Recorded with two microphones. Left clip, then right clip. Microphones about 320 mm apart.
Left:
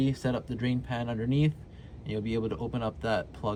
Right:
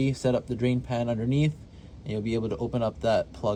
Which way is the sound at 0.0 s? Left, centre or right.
Centre.